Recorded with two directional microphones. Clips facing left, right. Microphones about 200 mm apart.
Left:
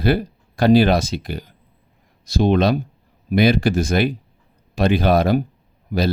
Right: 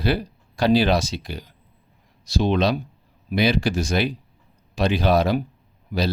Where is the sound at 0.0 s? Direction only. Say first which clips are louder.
Left 4 dB; 55° left (ahead or behind).